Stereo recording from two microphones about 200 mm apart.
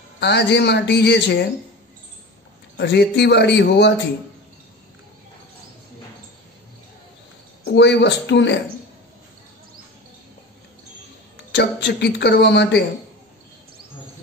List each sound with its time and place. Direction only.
0.2 s speech: 60° left (ahead or behind)
2.8 s speech: 55° left (ahead or behind)
7.6 s speech: 60° left (ahead or behind)
11.5 s speech: 60° left (ahead or behind)